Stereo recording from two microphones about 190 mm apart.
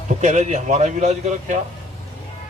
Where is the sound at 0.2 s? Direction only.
40° right (ahead or behind).